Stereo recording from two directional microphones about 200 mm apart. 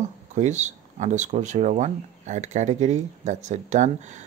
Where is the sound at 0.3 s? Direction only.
35° right (ahead or behind).